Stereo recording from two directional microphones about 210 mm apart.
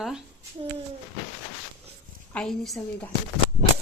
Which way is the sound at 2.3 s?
5° left (ahead or behind).